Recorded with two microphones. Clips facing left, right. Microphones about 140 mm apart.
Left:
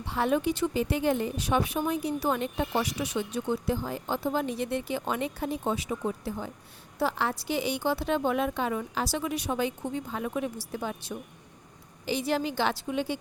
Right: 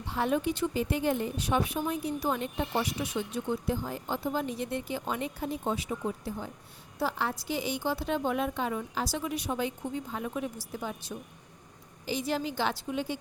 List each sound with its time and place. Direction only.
0.1 s a woman's voice: 80° left
7.0 s a woman's voice: 75° left (ahead or behind)